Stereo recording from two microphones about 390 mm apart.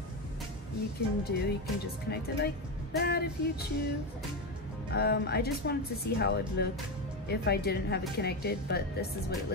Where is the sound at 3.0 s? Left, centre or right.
Left.